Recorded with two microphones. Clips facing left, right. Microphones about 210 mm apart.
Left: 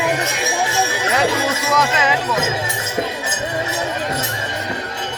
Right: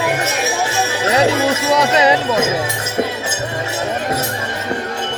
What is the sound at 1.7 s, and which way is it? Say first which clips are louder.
Speech: right 5 dB; 35° right (ahead or behind).